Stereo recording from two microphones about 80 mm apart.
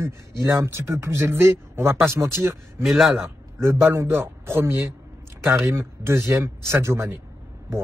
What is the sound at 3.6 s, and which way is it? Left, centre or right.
Speech, right.